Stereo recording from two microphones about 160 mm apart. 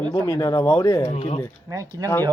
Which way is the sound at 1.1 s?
40° left (ahead or behind).